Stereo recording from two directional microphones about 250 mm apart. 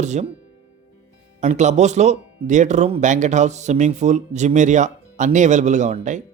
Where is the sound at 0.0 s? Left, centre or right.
Right.